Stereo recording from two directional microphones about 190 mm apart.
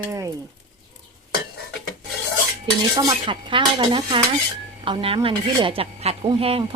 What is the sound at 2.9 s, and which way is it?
Speech, 25° right (ahead or behind).